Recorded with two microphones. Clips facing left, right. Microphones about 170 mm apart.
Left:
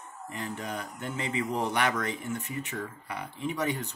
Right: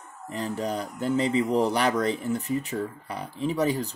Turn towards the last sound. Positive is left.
turn(degrees=-35)  # may be behind; listen again after turning